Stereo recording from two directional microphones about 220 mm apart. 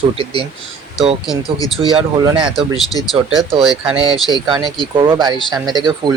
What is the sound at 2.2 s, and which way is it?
Speech, 20° right (ahead or behind).